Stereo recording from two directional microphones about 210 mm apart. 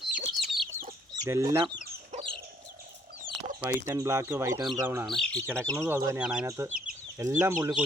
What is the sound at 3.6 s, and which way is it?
Speech, 15° right (ahead or behind).